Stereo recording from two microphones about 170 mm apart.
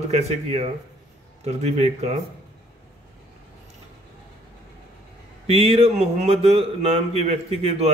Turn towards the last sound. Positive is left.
turn(degrees=-40)  # may be behind; listen again after turning